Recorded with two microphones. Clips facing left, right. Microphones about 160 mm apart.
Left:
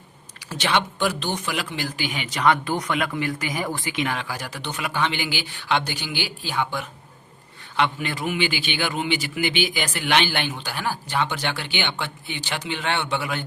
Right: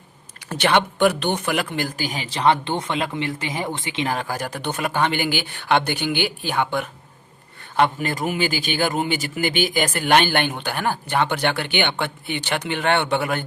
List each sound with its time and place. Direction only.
0.4 s speech: 55° right (ahead or behind)
2.0 s a man's voice: 35° right (ahead or behind); by 6.8 s 55° right (ahead or behind)
7.8 s a man's voice: 45° right (ahead or behind)